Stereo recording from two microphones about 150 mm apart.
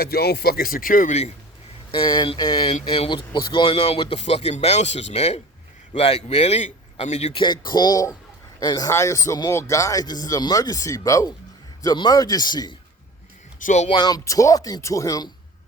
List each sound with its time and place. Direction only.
0.0 s speech: 90° left; by 1.1 s 65° left (ahead or behind)
1.9 s a man's voice: 30° left (ahead or behind)
7.4 s speech: 30° left (ahead or behind)
13.6 s speech: 60° left (ahead or behind)
13.8 s speech: 30° left (ahead or behind)